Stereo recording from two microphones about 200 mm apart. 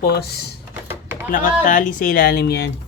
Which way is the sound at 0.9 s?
10° right (ahead or behind).